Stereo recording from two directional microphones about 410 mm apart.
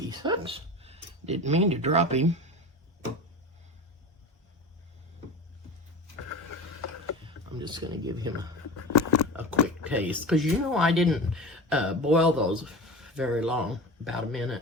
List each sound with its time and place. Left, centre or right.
0.1 s speech: centre
7.9 s speech: centre
8.9 s a sound: left
9.3 s speech: centre